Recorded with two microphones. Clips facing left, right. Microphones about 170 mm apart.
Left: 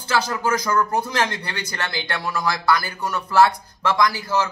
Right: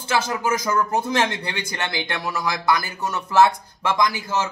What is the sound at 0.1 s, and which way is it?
Speech, 20° right (ahead or behind).